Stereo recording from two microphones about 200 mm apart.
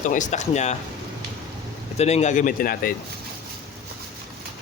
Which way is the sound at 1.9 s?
35° left (ahead or behind).